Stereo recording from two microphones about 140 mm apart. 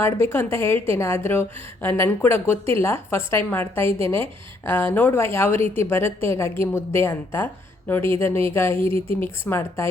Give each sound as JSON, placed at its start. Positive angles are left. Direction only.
{"t": 0.2, "sound": "a woman's voice", "side_deg": 15}
{"t": 3.8, "sound": "speech", "side_deg": -45}
{"t": 4.6, "sound": "a woman's voice", "side_deg": 15}
{"t": 8.8, "sound": "speech", "side_deg": -40}
{"t": 9.2, "sound": "a woman's voice", "side_deg": 15}